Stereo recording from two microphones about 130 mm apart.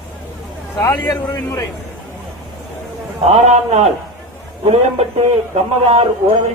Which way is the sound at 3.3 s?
55° right (ahead or behind).